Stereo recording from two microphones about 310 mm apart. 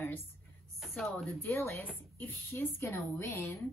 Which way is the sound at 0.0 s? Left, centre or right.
Centre.